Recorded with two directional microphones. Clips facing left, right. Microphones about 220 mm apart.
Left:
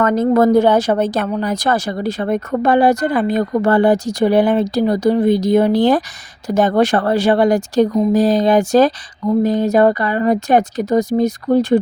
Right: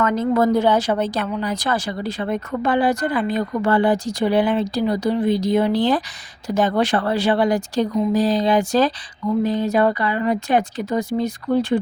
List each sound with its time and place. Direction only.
0.0 s a woman's voice: 45° left (ahead or behind)